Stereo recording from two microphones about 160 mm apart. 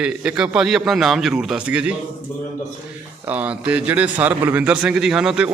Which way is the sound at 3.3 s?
10° right (ahead or behind).